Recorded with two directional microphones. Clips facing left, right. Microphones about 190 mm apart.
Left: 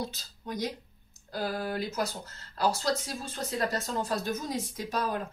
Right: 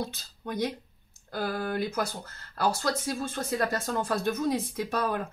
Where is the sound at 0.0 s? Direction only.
55° right (ahead or behind).